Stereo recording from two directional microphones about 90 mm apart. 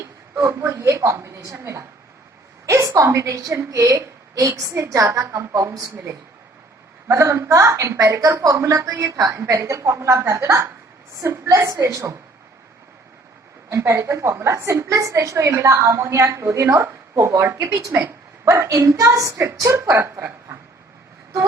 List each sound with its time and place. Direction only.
0.0 s a woman's voice: 35° right (ahead or behind)
2.9 s a woman's voice: 30° right (ahead or behind)
7.1 s a woman's voice: 30° right (ahead or behind)
13.7 s a woman's voice: 30° right (ahead or behind)
17.7 s a woman's voice: 40° right (ahead or behind)